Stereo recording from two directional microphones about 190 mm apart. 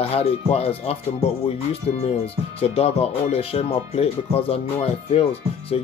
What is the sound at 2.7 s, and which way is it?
Speech, 30° left (ahead or behind).